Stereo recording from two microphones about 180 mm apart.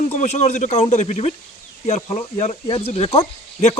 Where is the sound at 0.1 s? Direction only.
40° left (ahead or behind).